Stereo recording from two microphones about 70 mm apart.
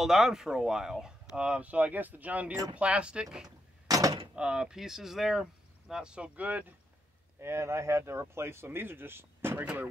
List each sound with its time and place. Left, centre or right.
0.0 s speech: centre
3.4 s a sound: right
4.4 s speech: centre
7.3 s speech: right